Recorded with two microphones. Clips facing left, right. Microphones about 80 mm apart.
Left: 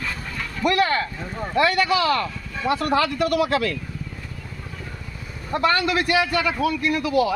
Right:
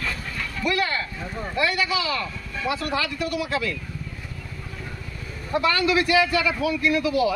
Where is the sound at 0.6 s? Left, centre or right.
Left.